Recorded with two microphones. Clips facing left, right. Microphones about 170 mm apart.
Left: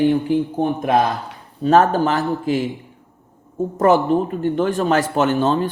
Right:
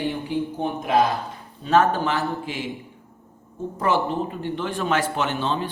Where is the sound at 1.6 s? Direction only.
40° left (ahead or behind).